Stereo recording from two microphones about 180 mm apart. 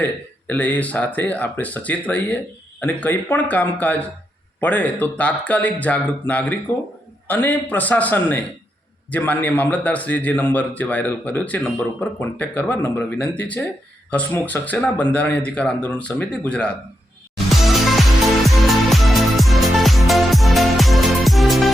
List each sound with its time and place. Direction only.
0.0 s a man's voice: 10° left (ahead or behind)
17.3 s music: centre (ahead or behind)